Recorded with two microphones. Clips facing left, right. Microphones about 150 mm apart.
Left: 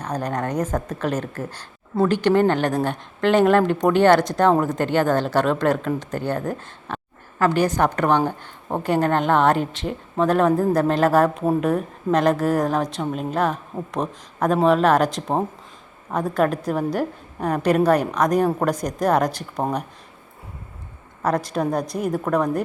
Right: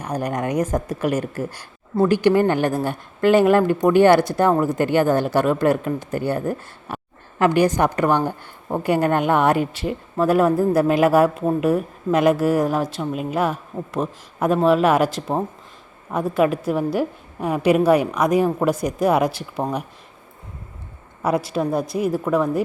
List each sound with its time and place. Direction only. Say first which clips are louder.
0.0 s a woman's voice: right 1 dB; 10° right (ahead or behind)
21.2 s a woman's voice: right 1 dB; 10° right (ahead or behind)